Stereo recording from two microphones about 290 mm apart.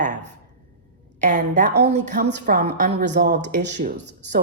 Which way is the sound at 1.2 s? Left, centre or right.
Right.